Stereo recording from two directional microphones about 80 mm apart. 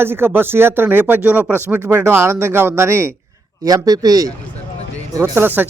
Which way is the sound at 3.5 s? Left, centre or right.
Right.